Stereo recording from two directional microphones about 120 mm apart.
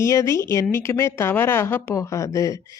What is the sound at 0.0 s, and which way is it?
A woman's voice, 25° left (ahead or behind).